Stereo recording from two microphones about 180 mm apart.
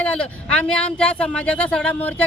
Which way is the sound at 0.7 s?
5° left (ahead or behind).